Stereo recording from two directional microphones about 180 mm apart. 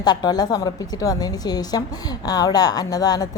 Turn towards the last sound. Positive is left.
turn(degrees=20)  # may be behind; listen again after turning